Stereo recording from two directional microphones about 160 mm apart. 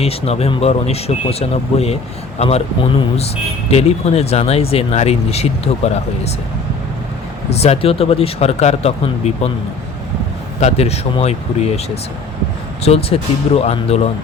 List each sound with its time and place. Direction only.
0.0 s speech: 40° left (ahead or behind)
3.7 s speech: 40° left (ahead or behind)
7.5 s speech: 40° left (ahead or behind)
10.6 s speech: 40° left (ahead or behind)
12.8 s speech: 40° left (ahead or behind)